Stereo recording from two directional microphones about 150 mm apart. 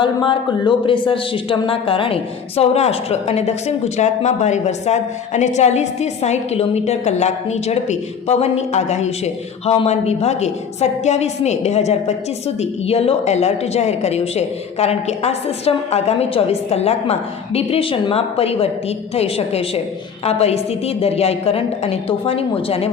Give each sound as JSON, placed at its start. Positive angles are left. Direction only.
{"t": 0.0, "sound": "a woman's voice", "side_deg": 30}